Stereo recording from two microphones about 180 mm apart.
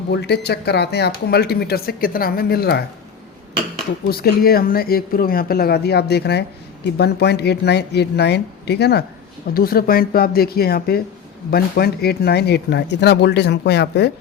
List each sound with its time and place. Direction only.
0.1 s speech: 65° left (ahead or behind)
4.1 s speech: 55° left (ahead or behind)
9.6 s speech: 55° left (ahead or behind)